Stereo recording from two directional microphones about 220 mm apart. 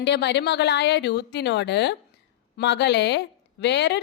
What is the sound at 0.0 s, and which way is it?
A woman's voice, 50° left (ahead or behind).